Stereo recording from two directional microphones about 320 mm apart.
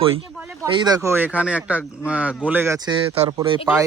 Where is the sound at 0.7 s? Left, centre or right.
Centre.